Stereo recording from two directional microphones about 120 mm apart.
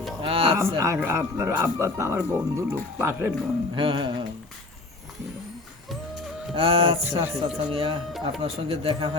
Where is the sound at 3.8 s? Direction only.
45° right (ahead or behind).